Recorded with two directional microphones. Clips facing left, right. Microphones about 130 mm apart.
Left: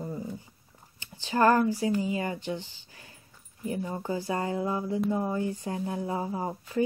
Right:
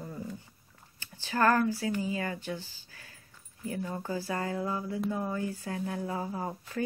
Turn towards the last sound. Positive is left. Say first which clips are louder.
# left 4 dB
turn(degrees=20)  # may be behind; listen again after turning